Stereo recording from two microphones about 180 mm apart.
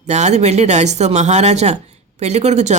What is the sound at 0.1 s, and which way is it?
Speech, 40° right (ahead or behind).